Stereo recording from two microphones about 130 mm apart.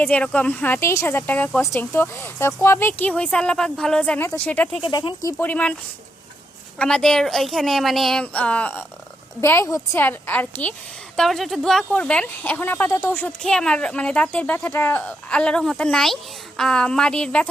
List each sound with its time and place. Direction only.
0.0 s speech: 10° left (ahead or behind)
4.8 s speech: 35° left (ahead or behind)
5.4 s speech: 10° left (ahead or behind)
6.7 s a woman's voice: 5° left (ahead or behind)
8.2 s speech: 10° left (ahead or behind)
9.4 s a woman's voice: 20° left (ahead or behind)
11.2 s speech: centre (ahead or behind); by 13.3 s 15° left (ahead or behind)
13.4 s speech: 5° left (ahead or behind)